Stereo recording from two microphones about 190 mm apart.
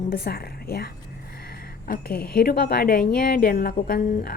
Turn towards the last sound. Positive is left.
turn(degrees=50)  # may be behind; listen again after turning